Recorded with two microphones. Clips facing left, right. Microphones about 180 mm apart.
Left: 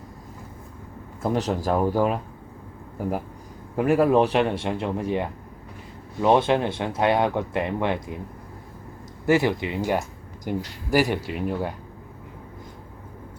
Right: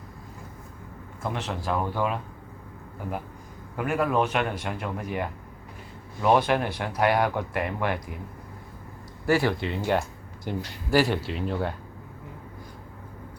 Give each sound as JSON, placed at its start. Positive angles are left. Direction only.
{"t": 1.2, "sound": "speech", "side_deg": 40}
{"t": 3.8, "sound": "speech", "side_deg": 35}
{"t": 9.2, "sound": "speech", "side_deg": 20}